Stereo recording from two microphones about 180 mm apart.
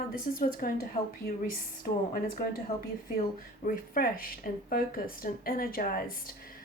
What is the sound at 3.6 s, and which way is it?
Speech, 50° left (ahead or behind).